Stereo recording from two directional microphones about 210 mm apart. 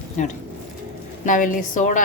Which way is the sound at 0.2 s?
35° left (ahead or behind).